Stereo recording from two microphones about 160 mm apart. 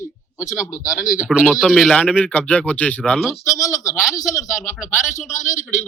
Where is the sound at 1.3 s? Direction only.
5° right (ahead or behind).